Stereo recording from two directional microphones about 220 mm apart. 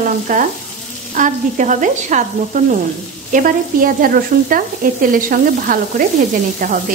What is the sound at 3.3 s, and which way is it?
Frying, 40° right (ahead or behind).